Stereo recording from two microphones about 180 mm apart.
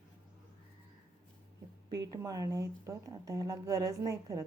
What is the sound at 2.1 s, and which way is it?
Speech, 20° right (ahead or behind).